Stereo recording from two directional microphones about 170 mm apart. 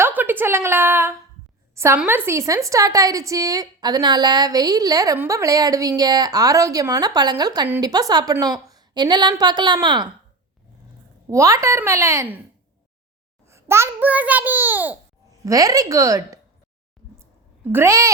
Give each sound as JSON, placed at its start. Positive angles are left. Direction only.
{"t": 0.0, "sound": "a woman's voice", "side_deg": -10}
{"t": 11.3, "sound": "a child's voice", "side_deg": -20}
{"t": 13.5, "sound": "a child's voice", "side_deg": -15}
{"t": 17.7, "sound": "a child's voice", "side_deg": -15}